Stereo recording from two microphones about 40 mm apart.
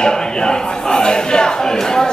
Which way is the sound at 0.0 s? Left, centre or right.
Centre.